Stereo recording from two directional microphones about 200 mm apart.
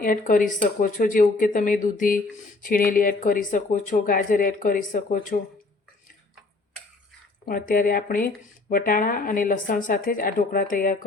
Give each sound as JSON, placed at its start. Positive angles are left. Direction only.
{"t": 0.0, "sound": "speech", "side_deg": 40}
{"t": 7.4, "sound": "speech", "side_deg": 45}